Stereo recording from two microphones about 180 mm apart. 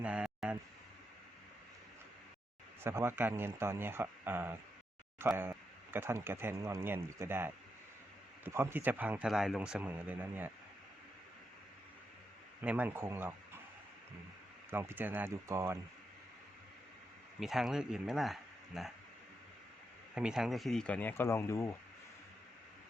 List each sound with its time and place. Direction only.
0.0 s a sound: 5° right (ahead or behind)
2.8 s speech: 15° right (ahead or behind)
12.6 s speech: 10° right (ahead or behind)
14.7 s speech: 10° right (ahead or behind)
17.4 s speech: centre (ahead or behind)
20.1 s speech: 5° right (ahead or behind); by 21.7 s 15° left (ahead or behind)